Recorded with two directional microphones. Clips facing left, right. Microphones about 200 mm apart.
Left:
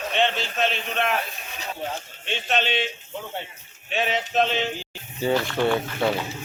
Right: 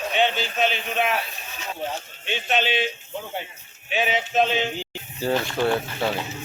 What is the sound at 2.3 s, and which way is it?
Speech, centre (ahead or behind).